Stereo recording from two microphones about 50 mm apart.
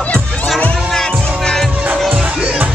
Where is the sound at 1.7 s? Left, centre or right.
Right.